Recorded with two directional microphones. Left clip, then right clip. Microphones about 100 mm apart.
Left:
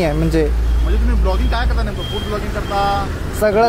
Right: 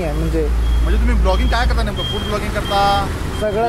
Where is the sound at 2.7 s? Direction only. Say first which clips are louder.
Right 2 dB; 30° right (ahead or behind).